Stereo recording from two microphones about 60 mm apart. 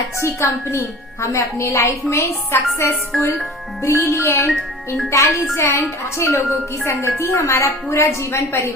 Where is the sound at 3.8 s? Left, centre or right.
Left.